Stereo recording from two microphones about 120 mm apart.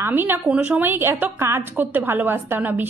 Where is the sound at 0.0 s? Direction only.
15° right (ahead or behind).